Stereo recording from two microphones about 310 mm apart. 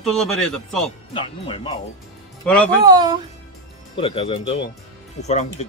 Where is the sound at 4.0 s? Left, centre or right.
Centre.